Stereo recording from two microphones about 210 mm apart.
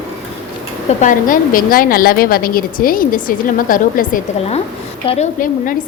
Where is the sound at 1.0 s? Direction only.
40° left (ahead or behind).